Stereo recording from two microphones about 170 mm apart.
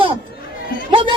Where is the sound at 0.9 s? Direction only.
30° right (ahead or behind).